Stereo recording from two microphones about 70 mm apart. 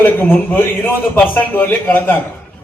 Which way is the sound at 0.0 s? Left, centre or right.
Left.